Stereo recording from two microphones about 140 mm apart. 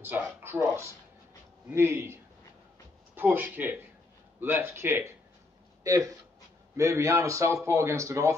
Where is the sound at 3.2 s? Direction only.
15° right (ahead or behind).